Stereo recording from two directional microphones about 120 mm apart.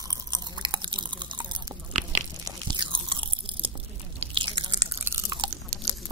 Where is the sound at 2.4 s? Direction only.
40° right (ahead or behind).